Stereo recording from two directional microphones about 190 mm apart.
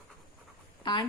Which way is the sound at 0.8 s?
25° left (ahead or behind).